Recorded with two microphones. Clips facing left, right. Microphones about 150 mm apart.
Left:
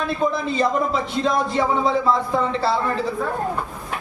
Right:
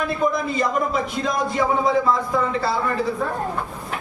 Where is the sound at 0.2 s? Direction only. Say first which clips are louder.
Left 2 dB; 30° left (ahead or behind).